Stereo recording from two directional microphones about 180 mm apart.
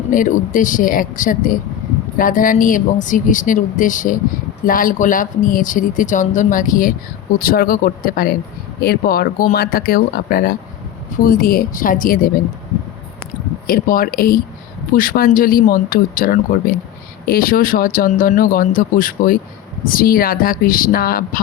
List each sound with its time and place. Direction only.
0.1 s speech: 50° left (ahead or behind)
13.7 s speech: 50° left (ahead or behind)